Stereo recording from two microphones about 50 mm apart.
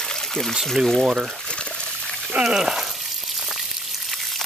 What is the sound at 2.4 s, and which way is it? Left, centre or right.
Speech, centre.